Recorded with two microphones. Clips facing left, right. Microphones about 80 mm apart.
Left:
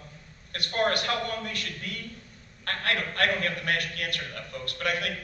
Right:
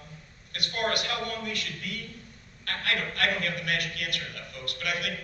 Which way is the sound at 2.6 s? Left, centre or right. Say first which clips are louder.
Left 1 dB; left.